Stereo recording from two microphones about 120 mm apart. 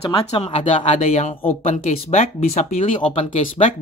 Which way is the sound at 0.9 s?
70° left (ahead or behind).